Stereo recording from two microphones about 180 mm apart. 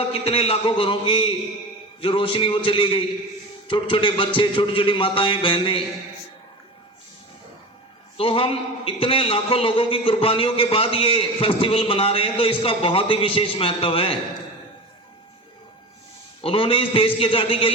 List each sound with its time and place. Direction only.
0.1 s a man's voice: 30° left (ahead or behind)
8.2 s a man's voice: 30° left (ahead or behind)
16.4 s a man's voice: 30° left (ahead or behind)